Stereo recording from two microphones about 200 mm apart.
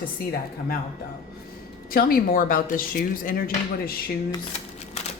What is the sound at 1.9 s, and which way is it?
Speech, 50° left (ahead or behind).